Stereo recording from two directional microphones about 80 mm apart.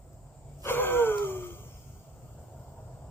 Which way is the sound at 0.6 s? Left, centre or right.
Left.